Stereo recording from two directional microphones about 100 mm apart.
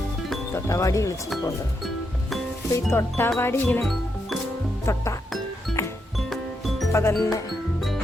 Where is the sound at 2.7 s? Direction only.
25° left (ahead or behind).